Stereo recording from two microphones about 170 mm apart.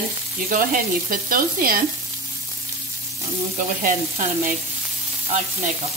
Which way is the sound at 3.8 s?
50° right (ahead or behind).